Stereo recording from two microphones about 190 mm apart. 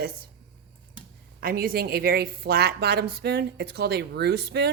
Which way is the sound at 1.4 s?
50° right (ahead or behind).